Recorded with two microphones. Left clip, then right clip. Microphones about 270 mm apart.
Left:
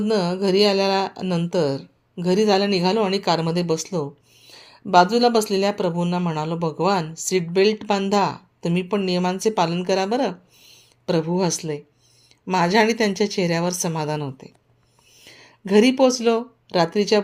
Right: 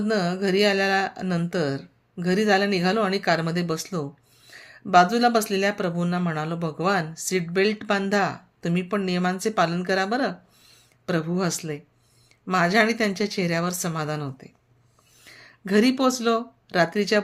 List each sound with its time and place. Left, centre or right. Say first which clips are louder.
0.0 s speech: left 3 dB; centre